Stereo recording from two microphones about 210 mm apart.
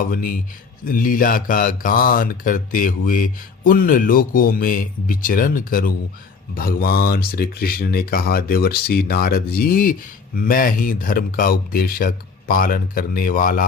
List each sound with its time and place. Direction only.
0.0 s speech: 40° left (ahead or behind)